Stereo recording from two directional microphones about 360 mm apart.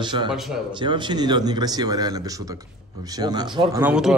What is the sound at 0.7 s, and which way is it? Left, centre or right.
A man's voice, centre.